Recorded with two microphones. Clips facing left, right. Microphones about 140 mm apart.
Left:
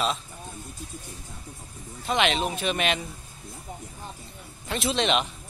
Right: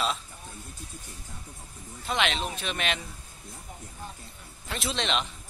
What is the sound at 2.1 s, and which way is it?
Speech, 5° left (ahead or behind).